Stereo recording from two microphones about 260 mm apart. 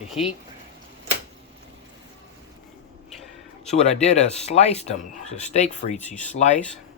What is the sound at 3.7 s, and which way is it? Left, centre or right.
Speech, left.